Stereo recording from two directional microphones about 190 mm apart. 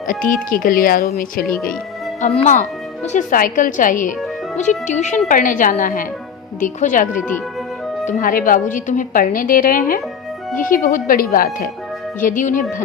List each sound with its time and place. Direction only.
0.1 s a woman's voice: 45° left (ahead or behind)
2.2 s a woman's voice: 35° left (ahead or behind)